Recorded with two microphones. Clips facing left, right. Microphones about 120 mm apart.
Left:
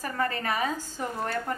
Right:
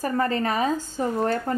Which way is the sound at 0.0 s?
35° right (ahead or behind).